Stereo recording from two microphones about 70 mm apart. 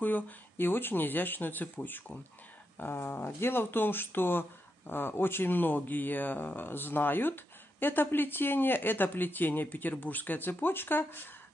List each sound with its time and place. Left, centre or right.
0.0 s speech: left